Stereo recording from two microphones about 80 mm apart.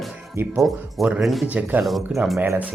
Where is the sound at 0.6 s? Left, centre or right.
Centre.